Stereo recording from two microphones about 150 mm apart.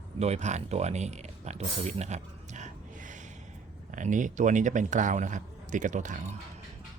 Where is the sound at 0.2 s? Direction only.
45° right (ahead or behind).